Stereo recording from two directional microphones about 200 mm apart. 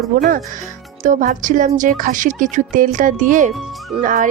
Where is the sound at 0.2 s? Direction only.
45° right (ahead or behind).